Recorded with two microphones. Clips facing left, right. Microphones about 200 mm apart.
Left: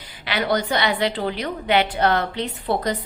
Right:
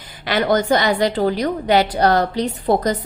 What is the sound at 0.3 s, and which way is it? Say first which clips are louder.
A woman's voice: right 6 dB; 45° right (ahead or behind).